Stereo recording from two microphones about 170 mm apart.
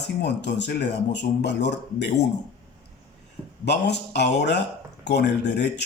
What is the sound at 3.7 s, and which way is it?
A man's voice, 80° left.